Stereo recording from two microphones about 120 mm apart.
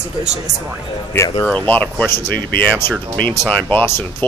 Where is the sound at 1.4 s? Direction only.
15° left (ahead or behind).